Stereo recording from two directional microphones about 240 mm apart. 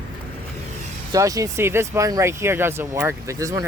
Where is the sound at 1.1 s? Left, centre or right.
Centre.